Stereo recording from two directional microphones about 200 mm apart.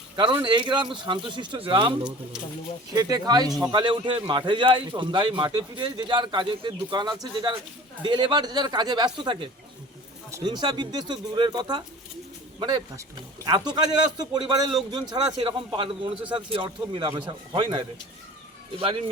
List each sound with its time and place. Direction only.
0.2 s speech: 25° right (ahead or behind)